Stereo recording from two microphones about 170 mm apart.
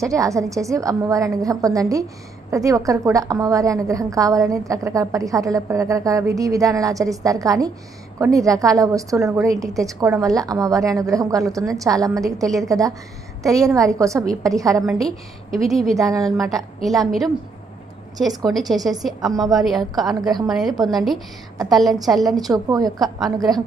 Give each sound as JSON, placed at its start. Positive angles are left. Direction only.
{"t": 0.0, "sound": "a woman's voice", "side_deg": -20}
{"t": 15.5, "sound": "a woman's voice", "side_deg": 0}
{"t": 16.0, "sound": "a woman's voice", "side_deg": -20}
{"t": 16.3, "sound": "a woman's voice", "side_deg": 0}
{"t": 18.3, "sound": "a woman's voice", "side_deg": 0}
{"t": 22.5, "sound": "a woman's voice", "side_deg": -20}
{"t": 22.9, "sound": "a woman's voice", "side_deg": 0}